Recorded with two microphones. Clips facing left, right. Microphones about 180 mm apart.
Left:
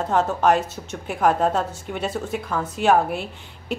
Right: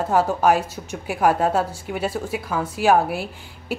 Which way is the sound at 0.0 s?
10° right (ahead or behind).